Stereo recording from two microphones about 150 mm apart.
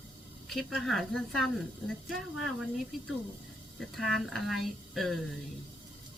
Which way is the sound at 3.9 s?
Centre (ahead or behind).